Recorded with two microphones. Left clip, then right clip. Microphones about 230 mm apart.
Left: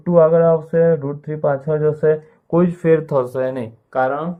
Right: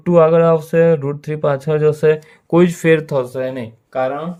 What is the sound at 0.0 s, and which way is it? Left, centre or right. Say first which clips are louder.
Speech: right 1 dB; right.